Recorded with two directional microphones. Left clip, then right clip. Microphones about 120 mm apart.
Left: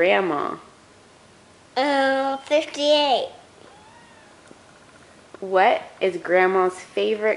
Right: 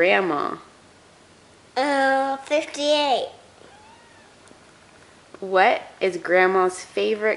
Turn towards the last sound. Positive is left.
turn(degrees=-10)  # may be behind; listen again after turning